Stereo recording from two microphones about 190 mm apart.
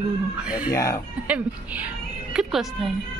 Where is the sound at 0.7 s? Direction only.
15° left (ahead or behind).